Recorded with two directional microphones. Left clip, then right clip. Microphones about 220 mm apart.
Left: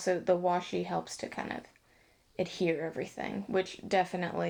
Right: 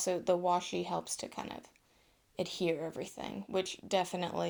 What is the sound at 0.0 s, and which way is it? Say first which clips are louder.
Speech: left 3 dB; 30° right (ahead or behind).